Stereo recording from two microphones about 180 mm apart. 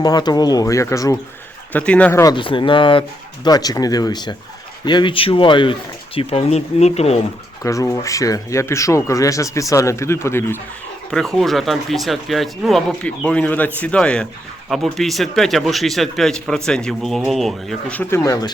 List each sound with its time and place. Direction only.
0.0 s speech: 20° left (ahead or behind)
1.7 s speech: 5° left (ahead or behind)
2.2 s speech: 25° left (ahead or behind)
7.6 s speech: 15° left (ahead or behind)
11.1 s speech: 5° left (ahead or behind)
18.2 s speech: 20° left (ahead or behind)